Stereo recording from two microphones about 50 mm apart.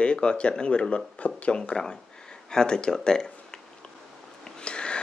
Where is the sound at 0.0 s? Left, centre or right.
Centre.